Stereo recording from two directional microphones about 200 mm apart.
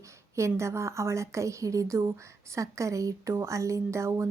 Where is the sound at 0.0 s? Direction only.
15° right (ahead or behind).